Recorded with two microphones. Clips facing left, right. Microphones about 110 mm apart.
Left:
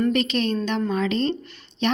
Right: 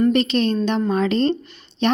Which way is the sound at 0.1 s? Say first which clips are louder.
Right 4 dB; 30° right (ahead or behind).